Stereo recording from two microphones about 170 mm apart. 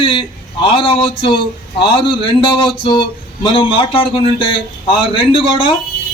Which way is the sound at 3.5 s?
30° left (ahead or behind).